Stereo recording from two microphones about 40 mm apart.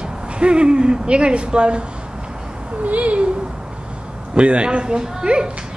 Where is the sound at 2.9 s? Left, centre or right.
Right.